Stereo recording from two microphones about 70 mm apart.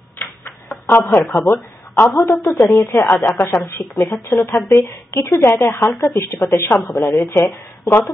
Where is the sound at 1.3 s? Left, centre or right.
Left.